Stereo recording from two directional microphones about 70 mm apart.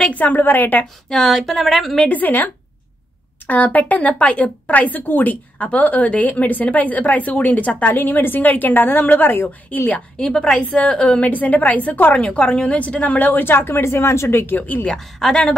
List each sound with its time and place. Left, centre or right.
0.0 s a woman's voice: left
1.0 s speech: centre
2.0 s a woman's voice: left
10.1 s a woman's voice: centre; by 14.4 s left
14.4 s a woman's voice: left
14.9 s speech: centre